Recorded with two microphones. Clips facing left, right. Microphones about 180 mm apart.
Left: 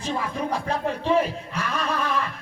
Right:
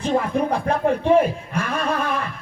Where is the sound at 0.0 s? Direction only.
55° right (ahead or behind).